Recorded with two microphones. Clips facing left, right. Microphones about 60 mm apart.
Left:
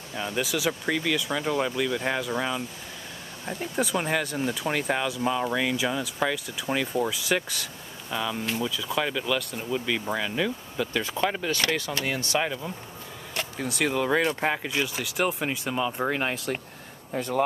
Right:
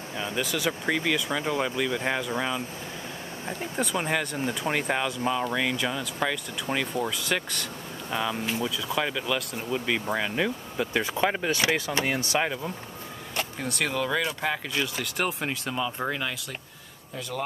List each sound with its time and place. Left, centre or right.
0.4 s speech: centre
0.8 s speech: centre
3.7 s speech: centre
8.1 s speech: centre
11.9 s speech: right
13.4 s speech: centre
16.1 s speech: left
17.1 s speech: left